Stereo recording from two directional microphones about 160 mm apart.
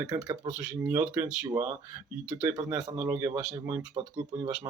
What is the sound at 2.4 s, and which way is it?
Speech, 15° right (ahead or behind).